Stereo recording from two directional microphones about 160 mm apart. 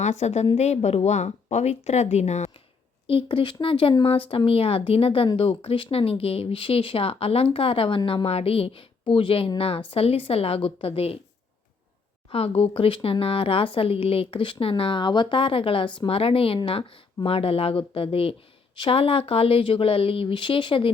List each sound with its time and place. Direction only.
0.0 s speech: 45° left (ahead or behind)
3.1 s speech: 35° left (ahead or behind)
12.3 s speech: 35° left (ahead or behind)